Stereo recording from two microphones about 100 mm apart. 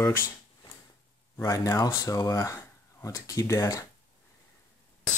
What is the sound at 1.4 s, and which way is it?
Speech, 35° left (ahead or behind).